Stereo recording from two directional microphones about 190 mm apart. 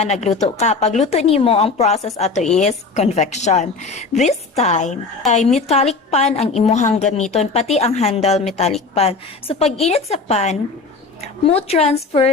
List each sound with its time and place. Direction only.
0.0 s speech: 35° left (ahead or behind)